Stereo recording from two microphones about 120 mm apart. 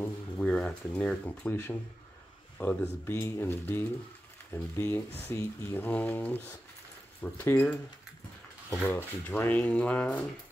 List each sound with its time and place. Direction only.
0.0 s speech: 10° left (ahead or behind)
8.8 s speech: 15° left (ahead or behind)